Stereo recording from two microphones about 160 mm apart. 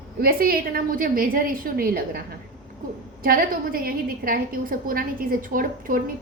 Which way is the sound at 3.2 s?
65° right (ahead or behind).